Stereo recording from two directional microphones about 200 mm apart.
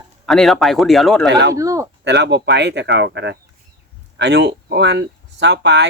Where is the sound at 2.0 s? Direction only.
60° right (ahead or behind).